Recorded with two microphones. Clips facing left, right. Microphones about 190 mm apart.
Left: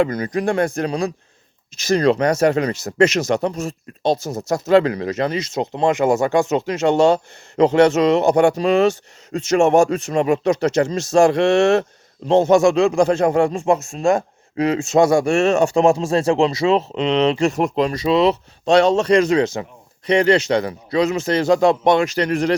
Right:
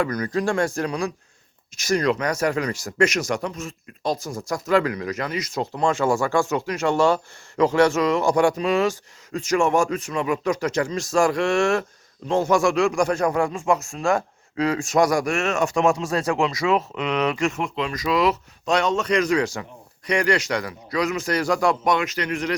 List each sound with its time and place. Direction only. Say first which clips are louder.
0.0 s a man's voice: left 4 dB; 25° left (ahead or behind)